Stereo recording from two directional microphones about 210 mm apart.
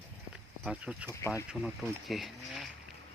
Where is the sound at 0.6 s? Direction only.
5° right (ahead or behind).